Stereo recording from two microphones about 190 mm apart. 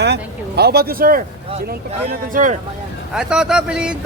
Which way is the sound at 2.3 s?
45° right (ahead or behind).